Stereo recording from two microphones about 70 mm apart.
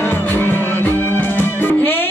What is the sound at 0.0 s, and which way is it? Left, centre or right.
Music, left.